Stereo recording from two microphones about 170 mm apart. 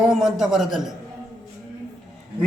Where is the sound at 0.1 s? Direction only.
Centre (ahead or behind).